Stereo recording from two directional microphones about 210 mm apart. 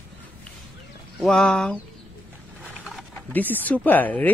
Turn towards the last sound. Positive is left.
turn(degrees=10)  # may be behind; listen again after turning